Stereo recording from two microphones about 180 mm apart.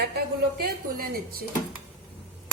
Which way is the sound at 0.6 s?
55° right (ahead or behind).